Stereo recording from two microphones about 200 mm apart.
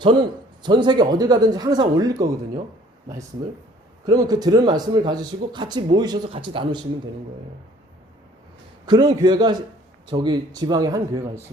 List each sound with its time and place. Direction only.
0.0 s speech: 20° right (ahead or behind)
4.0 s speech: 20° right (ahead or behind)
8.9 s speech: 20° right (ahead or behind)